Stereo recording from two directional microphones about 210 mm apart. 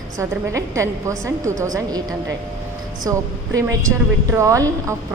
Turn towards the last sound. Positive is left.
turn(degrees=-15)  # may be behind; listen again after turning